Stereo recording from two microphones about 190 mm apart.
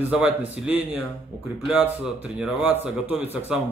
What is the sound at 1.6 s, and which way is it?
Speech, 5° right (ahead or behind).